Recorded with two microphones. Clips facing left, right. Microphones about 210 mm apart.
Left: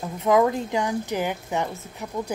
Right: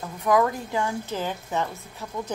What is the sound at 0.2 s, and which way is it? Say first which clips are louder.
A woman's voice: left 2 dB; 20° left (ahead or behind).